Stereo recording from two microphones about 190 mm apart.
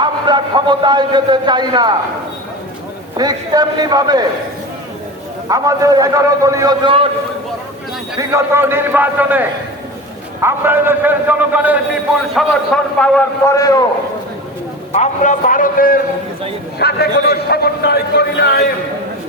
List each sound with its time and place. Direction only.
0.0 s a man's voice: 25° right (ahead or behind)
3.2 s a man's voice: 20° right (ahead or behind)
5.5 s a man's voice: 15° right (ahead or behind)
8.2 s a man's voice: 15° right (ahead or behind); by 13.2 s 5° left (ahead or behind)
13.5 s a man's voice: 20° left (ahead or behind)
14.9 s a man's voice: 40° left (ahead or behind); by 18.6 s 60° left (ahead or behind)